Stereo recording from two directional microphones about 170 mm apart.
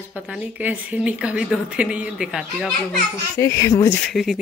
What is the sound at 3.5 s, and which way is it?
Speech, 15° left (ahead or behind).